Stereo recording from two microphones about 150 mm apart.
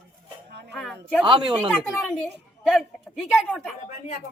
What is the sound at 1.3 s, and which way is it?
Speech, 35° right (ahead or behind).